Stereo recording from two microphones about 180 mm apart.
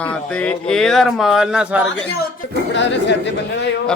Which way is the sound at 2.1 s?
70° left (ahead or behind).